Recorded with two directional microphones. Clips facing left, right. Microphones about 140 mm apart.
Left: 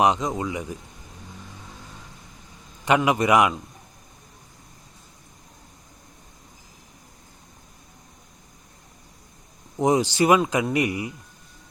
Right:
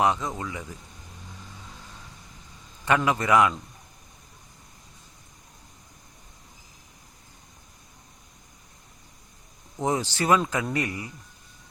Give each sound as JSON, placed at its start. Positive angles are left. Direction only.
{"t": 0.0, "sound": "a man's voice", "side_deg": 15}
{"t": 2.8, "sound": "a man's voice", "side_deg": 15}
{"t": 9.7, "sound": "a man's voice", "side_deg": 15}